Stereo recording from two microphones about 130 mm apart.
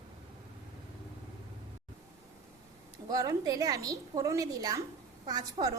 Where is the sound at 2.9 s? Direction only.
25° right (ahead or behind).